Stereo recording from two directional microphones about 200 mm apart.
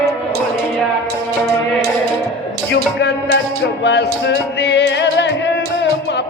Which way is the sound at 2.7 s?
60° left (ahead or behind).